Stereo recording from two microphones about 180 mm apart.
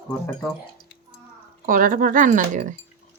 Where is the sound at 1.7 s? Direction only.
50° right (ahead or behind).